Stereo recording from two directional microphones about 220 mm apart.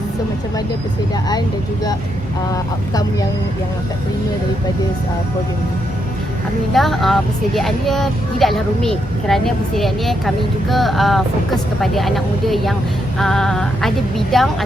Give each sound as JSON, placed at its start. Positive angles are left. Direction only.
{"t": 1.3, "sound": "speech", "side_deg": 20}
{"t": 6.7, "sound": "speech", "side_deg": 0}